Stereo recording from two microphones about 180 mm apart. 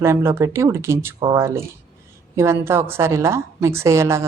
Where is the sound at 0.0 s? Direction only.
15° right (ahead or behind).